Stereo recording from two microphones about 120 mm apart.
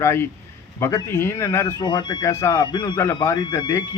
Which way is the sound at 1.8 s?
35° left (ahead or behind).